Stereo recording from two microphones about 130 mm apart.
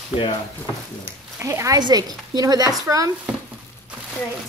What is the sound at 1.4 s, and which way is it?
A woman's voice, 25° right (ahead or behind).